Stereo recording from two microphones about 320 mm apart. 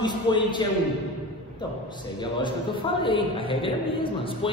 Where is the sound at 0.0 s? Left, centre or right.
Centre.